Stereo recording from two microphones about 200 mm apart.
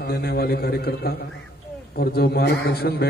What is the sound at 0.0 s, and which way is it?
A man's voice, 50° left (ahead or behind).